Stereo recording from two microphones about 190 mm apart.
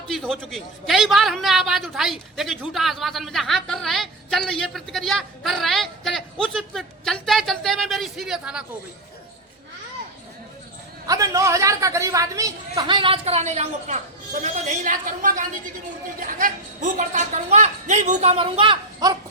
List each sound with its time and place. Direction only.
0.1 s a man's voice: centre (ahead or behind)
11.0 s a woman's voice: 20° right (ahead or behind)